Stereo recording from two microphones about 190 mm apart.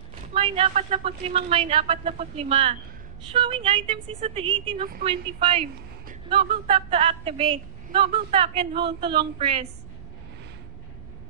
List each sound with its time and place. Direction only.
0.3 s a man's voice: 35° right (ahead or behind)